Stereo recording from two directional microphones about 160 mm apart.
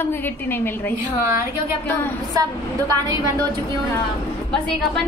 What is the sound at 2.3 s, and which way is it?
Speech, 20° right (ahead or behind).